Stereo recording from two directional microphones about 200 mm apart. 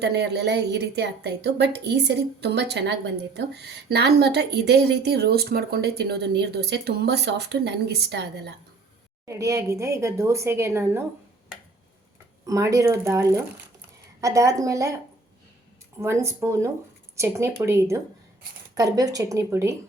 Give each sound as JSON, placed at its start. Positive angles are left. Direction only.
{"t": 0.0, "sound": "speech", "side_deg": -55}
{"t": 9.2, "sound": "a woman's voice", "side_deg": -15}
{"t": 12.5, "sound": "a woman's voice", "side_deg": -15}
{"t": 16.0, "sound": "a woman's voice", "side_deg": -15}